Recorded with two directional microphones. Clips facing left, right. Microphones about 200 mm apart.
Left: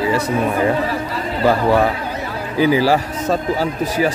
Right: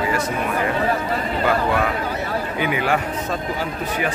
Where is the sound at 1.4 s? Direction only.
35° left (ahead or behind).